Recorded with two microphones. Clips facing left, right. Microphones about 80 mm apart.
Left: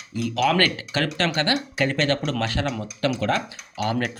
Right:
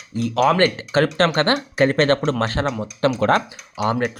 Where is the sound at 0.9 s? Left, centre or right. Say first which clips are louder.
Right 7 dB; right.